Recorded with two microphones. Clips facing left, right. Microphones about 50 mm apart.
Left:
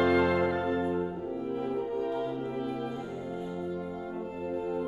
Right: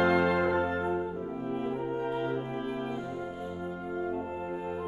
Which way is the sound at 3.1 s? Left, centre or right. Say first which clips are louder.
Left 1 dB; right.